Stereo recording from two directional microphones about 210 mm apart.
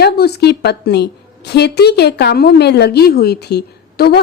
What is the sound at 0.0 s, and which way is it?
A woman's voice, 50° left (ahead or behind).